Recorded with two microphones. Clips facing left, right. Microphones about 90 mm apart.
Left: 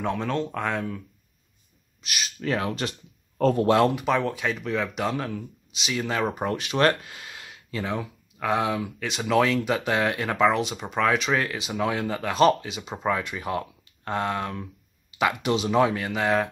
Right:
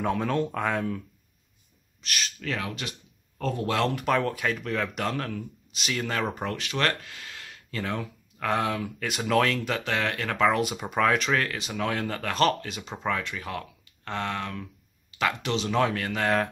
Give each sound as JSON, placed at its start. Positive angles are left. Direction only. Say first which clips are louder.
{"t": 0.0, "sound": "speech", "louder": "right 1 dB", "side_deg": -5}
{"t": 2.0, "sound": "speech", "louder": "even", "side_deg": 10}
{"t": 2.5, "sound": "speech", "louder": "left 7 dB", "side_deg": 30}
{"t": 3.8, "sound": "speech", "louder": "left 3 dB", "side_deg": 5}
{"t": 7.7, "sound": "speech", "louder": "left 2 dB", "side_deg": 5}